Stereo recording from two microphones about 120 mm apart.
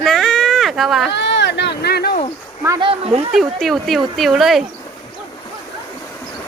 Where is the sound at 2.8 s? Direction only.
45° right (ahead or behind).